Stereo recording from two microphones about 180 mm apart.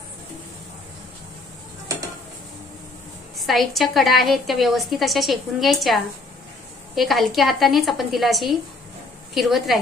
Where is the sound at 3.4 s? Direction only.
Centre (ahead or behind).